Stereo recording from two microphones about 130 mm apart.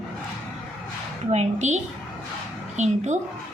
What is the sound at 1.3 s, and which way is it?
A woman's voice, 60° right (ahead or behind).